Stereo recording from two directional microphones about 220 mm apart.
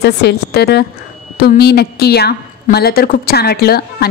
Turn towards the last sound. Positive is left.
turn(degrees=45)  # may be behind; listen again after turning